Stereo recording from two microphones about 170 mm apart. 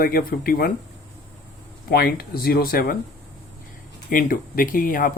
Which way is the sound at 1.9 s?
60° left (ahead or behind).